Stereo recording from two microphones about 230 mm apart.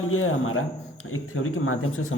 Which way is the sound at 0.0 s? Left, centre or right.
Left.